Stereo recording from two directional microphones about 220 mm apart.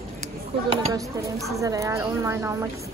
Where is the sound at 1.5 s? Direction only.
15° right (ahead or behind).